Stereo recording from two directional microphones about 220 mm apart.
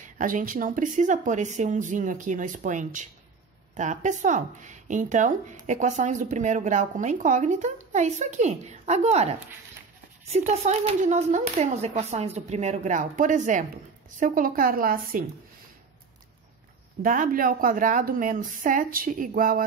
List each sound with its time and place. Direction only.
0.0 s speech: 40° right (ahead or behind)
17.0 s speech: 40° right (ahead or behind)